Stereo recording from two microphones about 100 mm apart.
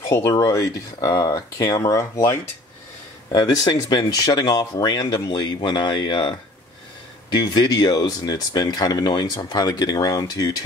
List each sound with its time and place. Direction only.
0.1 s speech: 35° left (ahead or behind)
0.9 s speech: 45° left (ahead or behind)
1.8 s speech: 35° left (ahead or behind); by 6.3 s 50° left (ahead or behind)
7.3 s speech: 45° left (ahead or behind)